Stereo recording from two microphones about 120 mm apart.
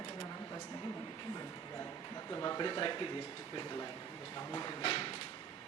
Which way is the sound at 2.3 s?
30° left (ahead or behind).